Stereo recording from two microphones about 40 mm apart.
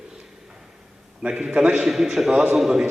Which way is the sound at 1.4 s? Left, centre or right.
Centre.